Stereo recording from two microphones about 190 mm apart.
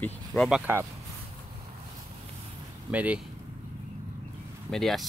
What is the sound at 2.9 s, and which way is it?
Speech, 5° right (ahead or behind).